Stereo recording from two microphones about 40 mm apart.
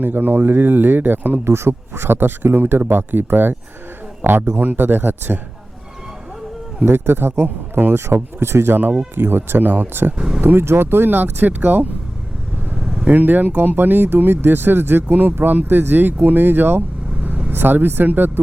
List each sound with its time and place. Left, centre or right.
0.0 s speech: right
1.6 s a man's voice: right
6.8 s speech: right
7.4 s speech: right
9.1 s speech: right
10.2 s speech: centre
10.4 s speech: right
11.1 s speech: right
12.7 s vehicle: right
13.1 s speech: right
15.0 s speech: right
15.8 s speech: right
17.2 s vehicle: right
17.5 s speech: right